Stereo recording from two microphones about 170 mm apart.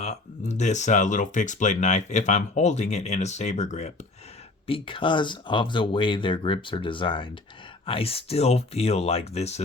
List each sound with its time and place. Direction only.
0.0 s speech: 40° left (ahead or behind)
4.6 s speech: 30° left (ahead or behind)